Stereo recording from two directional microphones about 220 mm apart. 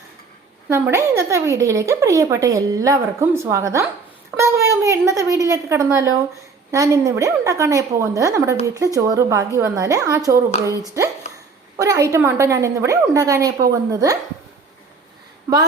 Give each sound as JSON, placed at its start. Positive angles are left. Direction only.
{"t": 0.7, "sound": "speech", "side_deg": -10}
{"t": 15.5, "sound": "speech", "side_deg": -15}